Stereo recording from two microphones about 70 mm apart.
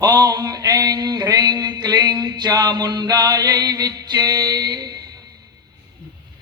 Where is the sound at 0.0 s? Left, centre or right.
Right.